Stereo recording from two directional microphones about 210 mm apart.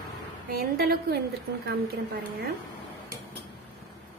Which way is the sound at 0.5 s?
45° right (ahead or behind).